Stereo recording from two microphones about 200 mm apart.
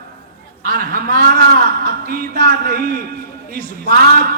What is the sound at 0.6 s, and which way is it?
A man's voice, 45° right (ahead or behind).